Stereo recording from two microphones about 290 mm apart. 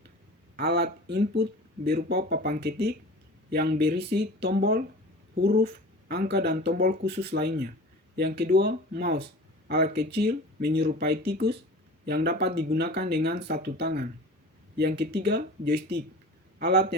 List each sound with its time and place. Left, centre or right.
0.5 s speech: right